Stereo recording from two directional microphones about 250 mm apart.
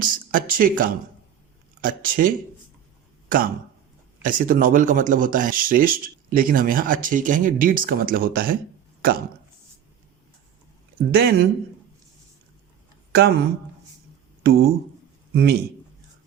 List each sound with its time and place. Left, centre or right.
0.0 s speech: right
9.0 s a sound: right
11.1 s speech: right
13.1 s a man's voice: right